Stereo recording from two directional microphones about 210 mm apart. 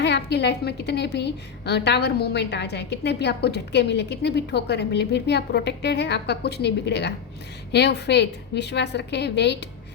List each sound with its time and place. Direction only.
0.0 s a woman's voice: 55° left (ahead or behind)